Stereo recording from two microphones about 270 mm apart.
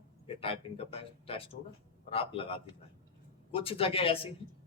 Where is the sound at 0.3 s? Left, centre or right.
Left.